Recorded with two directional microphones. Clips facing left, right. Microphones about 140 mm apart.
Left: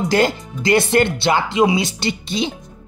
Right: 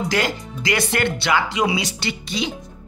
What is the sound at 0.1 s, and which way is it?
Speech, 30° left (ahead or behind).